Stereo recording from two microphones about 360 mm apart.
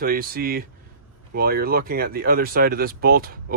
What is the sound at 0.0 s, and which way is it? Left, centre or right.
Speech, right.